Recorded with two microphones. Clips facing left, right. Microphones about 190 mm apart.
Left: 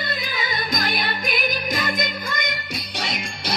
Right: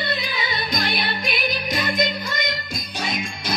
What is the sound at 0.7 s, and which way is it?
Music, 45° left (ahead or behind).